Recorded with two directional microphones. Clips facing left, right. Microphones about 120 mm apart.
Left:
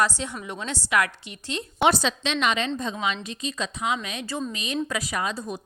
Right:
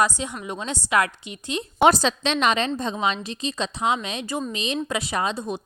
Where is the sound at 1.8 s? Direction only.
40° right (ahead or behind).